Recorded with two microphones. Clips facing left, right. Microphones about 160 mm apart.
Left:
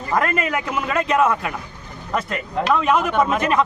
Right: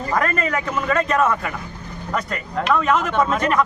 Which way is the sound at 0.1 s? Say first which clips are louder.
Left 1 dB; 15° left (ahead or behind).